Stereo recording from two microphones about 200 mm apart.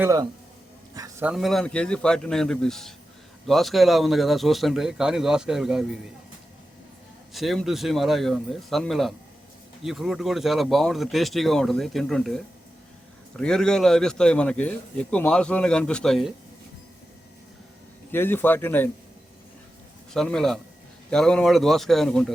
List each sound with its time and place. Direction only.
0.0 s a man's voice: 15° right (ahead or behind)
0.9 s a sound: 15° right (ahead or behind)
1.3 s a man's voice: centre (ahead or behind)
7.3 s a man's voice: centre (ahead or behind)
18.1 s speech: 10° left (ahead or behind)
20.1 s a man's voice: 5° left (ahead or behind)